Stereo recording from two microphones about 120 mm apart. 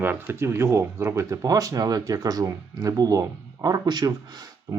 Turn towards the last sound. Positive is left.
turn(degrees=-35)  # may be behind; listen again after turning